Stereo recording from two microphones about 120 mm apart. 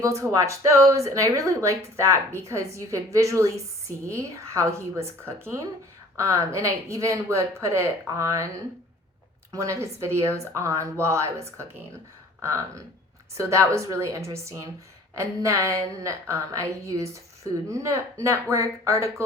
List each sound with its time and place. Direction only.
0.2 s a woman's voice: 25° right (ahead or behind)
9.5 s a woman's voice: 25° right (ahead or behind)